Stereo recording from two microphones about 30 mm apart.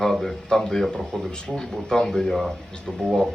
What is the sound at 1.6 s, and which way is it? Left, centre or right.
Speech, centre.